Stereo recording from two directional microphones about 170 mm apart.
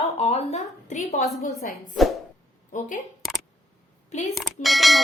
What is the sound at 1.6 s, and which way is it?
Speech, 60° left (ahead or behind).